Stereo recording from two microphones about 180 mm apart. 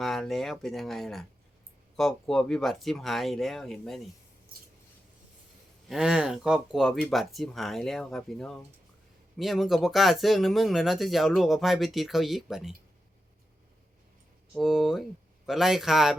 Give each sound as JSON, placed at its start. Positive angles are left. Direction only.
{"t": 0.0, "sound": "speech", "side_deg": 0}
{"t": 5.9, "sound": "speech", "side_deg": -5}
{"t": 14.5, "sound": "speech", "side_deg": 0}